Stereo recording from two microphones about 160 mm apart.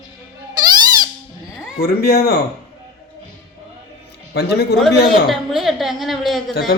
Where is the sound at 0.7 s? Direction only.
25° right (ahead or behind).